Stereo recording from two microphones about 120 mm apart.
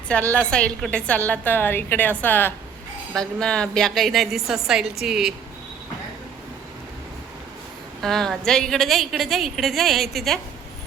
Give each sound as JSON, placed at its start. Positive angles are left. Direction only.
{"t": 0.3, "sound": "a woman's voice", "side_deg": 10}
{"t": 8.0, "sound": "a woman's voice", "side_deg": 5}